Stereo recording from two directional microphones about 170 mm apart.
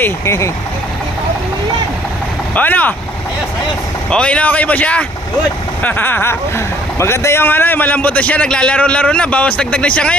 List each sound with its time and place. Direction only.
0.0 s a man's voice: 15° left (ahead or behind)
2.5 s a man's voice: 10° left (ahead or behind)
4.1 s a man's voice: 5° left (ahead or behind)